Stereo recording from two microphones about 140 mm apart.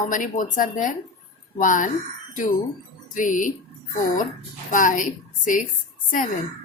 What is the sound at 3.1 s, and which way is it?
Speech, 65° left (ahead or behind).